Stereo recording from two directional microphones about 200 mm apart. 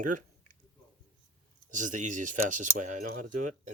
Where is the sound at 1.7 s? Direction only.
40° right (ahead or behind).